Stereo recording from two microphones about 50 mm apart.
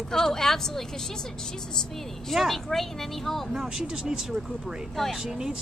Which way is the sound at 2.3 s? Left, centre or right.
Centre.